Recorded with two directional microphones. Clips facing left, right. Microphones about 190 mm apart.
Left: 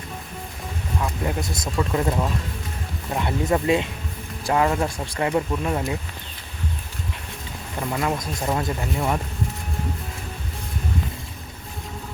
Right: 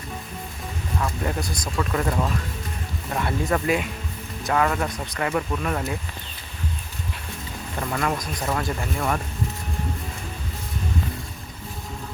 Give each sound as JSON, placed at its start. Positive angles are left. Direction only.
{"t": 0.9, "sound": "speech", "side_deg": 15}
{"t": 7.8, "sound": "speech", "side_deg": 15}